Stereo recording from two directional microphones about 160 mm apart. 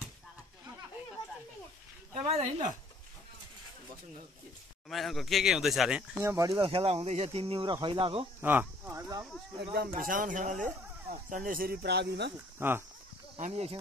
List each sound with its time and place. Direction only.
2.2 s a woman's voice: 40° right (ahead or behind)
4.8 s speech: centre (ahead or behind)
6.2 s speech: 20° right (ahead or behind)
6.6 s speech: 35° right (ahead or behind)
8.4 s a sound: 10° right (ahead or behind)
9.8 s speech: 60° right (ahead or behind); by 12.3 s 90° right
12.5 s speech: 15° right (ahead or behind)
13.4 s speech: 40° right (ahead or behind)